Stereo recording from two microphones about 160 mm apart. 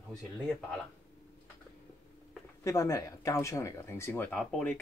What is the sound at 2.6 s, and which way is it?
Speech, 20° left (ahead or behind).